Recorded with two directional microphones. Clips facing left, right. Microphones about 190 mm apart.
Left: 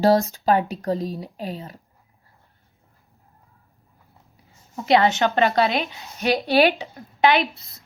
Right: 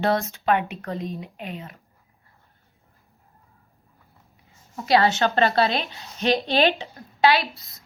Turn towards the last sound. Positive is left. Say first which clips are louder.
# left 2 dB
turn(degrees=25)  # may be behind; listen again after turning